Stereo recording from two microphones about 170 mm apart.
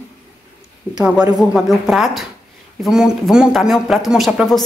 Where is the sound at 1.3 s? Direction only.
Centre (ahead or behind).